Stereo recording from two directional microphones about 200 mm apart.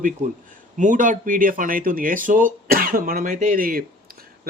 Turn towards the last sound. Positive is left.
turn(degrees=-45)  # may be behind; listen again after turning